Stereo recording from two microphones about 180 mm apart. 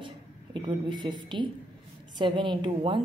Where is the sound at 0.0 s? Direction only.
30° right (ahead or behind).